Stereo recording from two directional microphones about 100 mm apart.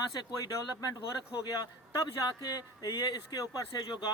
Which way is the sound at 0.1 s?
45° left (ahead or behind).